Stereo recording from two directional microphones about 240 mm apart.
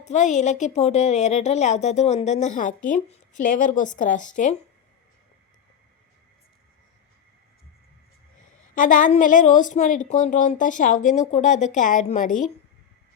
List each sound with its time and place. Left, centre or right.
0.0 s a woman's voice: left
8.7 s a woman's voice: left